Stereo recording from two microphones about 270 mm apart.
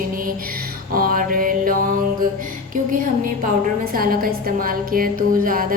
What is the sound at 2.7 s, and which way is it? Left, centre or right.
Music, right.